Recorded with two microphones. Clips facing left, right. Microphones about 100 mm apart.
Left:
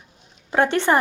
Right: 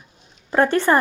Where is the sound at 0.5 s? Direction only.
20° left (ahead or behind).